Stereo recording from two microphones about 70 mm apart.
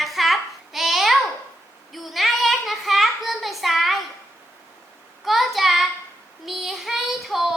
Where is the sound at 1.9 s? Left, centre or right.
Centre.